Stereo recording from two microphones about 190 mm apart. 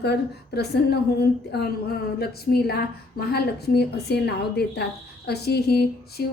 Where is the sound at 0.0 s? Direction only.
60° left (ahead or behind).